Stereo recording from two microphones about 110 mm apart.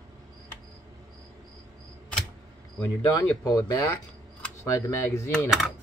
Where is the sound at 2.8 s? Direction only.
30° left (ahead or behind).